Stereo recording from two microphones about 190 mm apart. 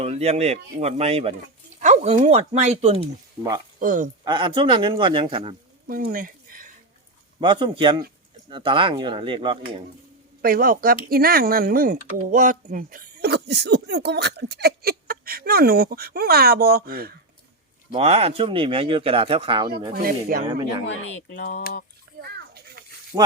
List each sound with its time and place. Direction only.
0.0 s speech: 35° right (ahead or behind)
4.3 s speech: 25° right (ahead or behind)
5.9 s a sound: 50° right (ahead or behind)
7.3 s speech: 25° right (ahead or behind)
10.4 s speech: 50° right (ahead or behind)
17.9 s speech: 30° right (ahead or behind)
19.9 s speech: 50° right (ahead or behind)
20.4 s speech: 25° right (ahead or behind)
21.2 s speech: 55° left (ahead or behind)
22.2 s a sound: 55° right (ahead or behind)
23.1 s speech: 20° right (ahead or behind)